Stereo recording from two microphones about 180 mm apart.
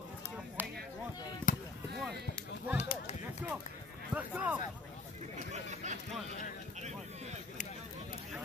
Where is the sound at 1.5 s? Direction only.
50° left (ahead or behind).